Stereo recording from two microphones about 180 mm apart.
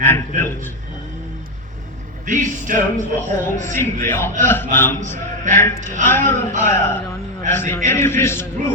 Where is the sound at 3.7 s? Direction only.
15° left (ahead or behind).